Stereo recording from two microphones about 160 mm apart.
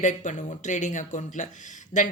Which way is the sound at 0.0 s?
50° left (ahead or behind).